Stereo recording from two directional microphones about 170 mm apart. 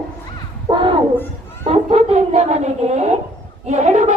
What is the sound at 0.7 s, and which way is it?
Children playing, 30° right (ahead or behind).